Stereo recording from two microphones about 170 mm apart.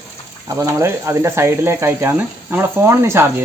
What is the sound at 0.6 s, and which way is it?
Speech, 15° right (ahead or behind).